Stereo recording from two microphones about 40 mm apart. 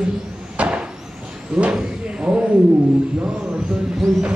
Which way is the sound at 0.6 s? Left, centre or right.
Right.